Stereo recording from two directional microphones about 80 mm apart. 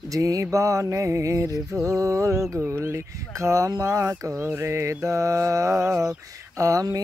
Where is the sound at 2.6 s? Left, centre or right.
Right.